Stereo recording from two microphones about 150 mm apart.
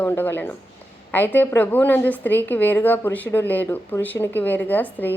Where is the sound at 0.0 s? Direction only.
15° left (ahead or behind).